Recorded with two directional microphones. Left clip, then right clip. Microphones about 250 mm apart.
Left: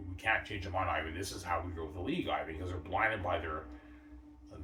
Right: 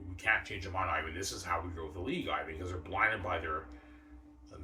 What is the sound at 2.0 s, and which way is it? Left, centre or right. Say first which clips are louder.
Speech: left 1 dB; centre.